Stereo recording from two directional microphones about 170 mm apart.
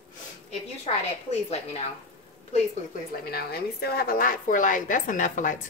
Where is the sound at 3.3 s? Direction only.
65° left (ahead or behind).